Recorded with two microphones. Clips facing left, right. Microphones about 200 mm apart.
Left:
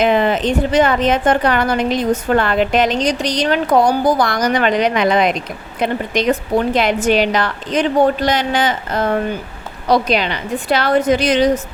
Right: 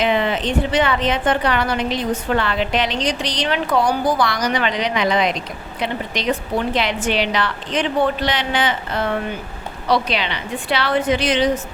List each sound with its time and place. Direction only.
0.0 s a woman's voice: 45° left (ahead or behind)